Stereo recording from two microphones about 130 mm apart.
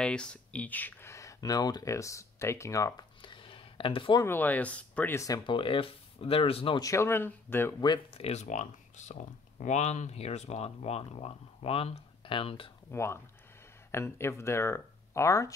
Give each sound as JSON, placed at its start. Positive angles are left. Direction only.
{"t": 0.0, "sound": "speech", "side_deg": 5}
{"t": 3.2, "sound": "a sound", "side_deg": 40}
{"t": 4.2, "sound": "speech", "side_deg": 15}
{"t": 5.1, "sound": "speech", "side_deg": 25}
{"t": 5.5, "sound": "speech", "side_deg": 40}
{"t": 6.8, "sound": "speech", "side_deg": 20}
{"t": 7.8, "sound": "speech", "side_deg": 35}
{"t": 8.2, "sound": "speech", "side_deg": 60}
{"t": 12.9, "sound": "speech", "side_deg": 20}